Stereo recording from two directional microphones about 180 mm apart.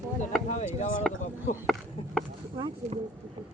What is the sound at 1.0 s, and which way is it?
Speech, centre (ahead or behind).